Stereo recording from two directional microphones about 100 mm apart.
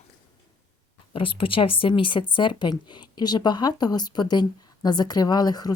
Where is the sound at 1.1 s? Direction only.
60° left (ahead or behind).